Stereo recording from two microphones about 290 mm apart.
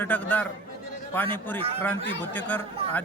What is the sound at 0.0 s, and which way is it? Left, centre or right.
Speech, centre.